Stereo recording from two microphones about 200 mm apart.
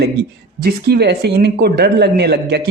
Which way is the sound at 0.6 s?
55° right (ahead or behind).